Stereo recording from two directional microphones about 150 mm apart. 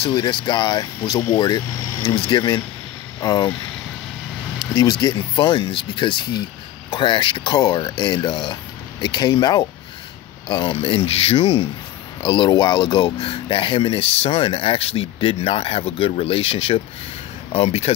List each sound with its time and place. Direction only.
0.0 s speech: 30° left (ahead or behind)
5.0 s speech: 30° left (ahead or behind)